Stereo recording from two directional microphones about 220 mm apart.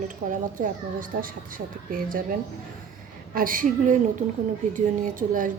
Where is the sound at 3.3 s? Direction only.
40° right (ahead or behind).